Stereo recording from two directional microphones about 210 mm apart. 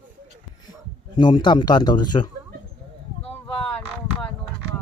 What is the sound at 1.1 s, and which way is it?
A man's voice, 20° left (ahead or behind).